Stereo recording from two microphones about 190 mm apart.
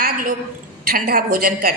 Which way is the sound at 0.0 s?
50° right (ahead or behind).